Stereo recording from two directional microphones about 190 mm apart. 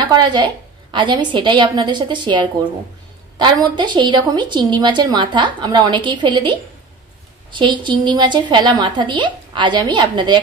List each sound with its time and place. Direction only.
0.0 s a woman's voice: 25° right (ahead or behind)